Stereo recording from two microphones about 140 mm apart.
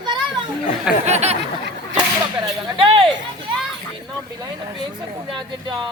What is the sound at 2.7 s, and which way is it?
Music, 35° right (ahead or behind).